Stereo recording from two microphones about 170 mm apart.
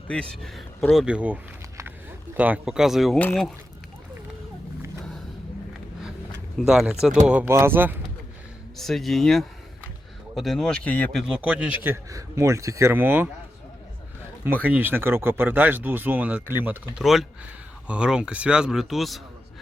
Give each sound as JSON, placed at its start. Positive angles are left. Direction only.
{"t": 0.1, "sound": "speech", "side_deg": 5}
{"t": 6.7, "sound": "speech", "side_deg": -5}
{"t": 8.8, "sound": "speech", "side_deg": 0}
{"t": 11.2, "sound": "speech", "side_deg": -5}
{"t": 14.6, "sound": "speech", "side_deg": -10}